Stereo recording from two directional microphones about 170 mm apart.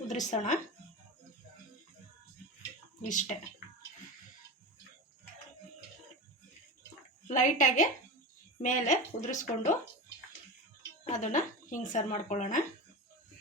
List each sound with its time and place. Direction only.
0.1 s speech: 45° left (ahead or behind)
3.0 s speech: 45° left (ahead or behind)
7.3 s speech: 50° left (ahead or behind)
11.0 s a woman's voice: 45° left (ahead or behind)